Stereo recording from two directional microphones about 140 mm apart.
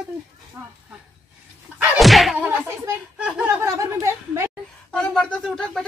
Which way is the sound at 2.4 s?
15° right (ahead or behind).